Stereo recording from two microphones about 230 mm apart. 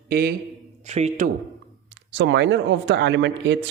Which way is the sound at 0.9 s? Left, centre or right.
Right.